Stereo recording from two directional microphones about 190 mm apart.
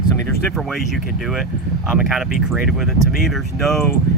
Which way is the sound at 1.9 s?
5° right (ahead or behind).